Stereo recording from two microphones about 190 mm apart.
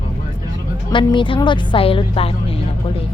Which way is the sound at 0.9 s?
25° left (ahead or behind).